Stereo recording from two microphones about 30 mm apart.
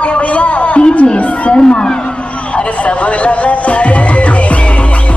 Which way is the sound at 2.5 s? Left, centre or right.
Left.